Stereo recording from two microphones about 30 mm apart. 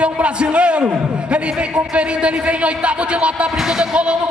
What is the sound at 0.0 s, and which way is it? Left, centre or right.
Speech, right.